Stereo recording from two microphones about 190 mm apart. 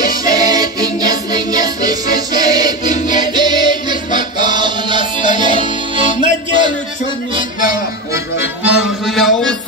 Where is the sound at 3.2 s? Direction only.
20° right (ahead or behind).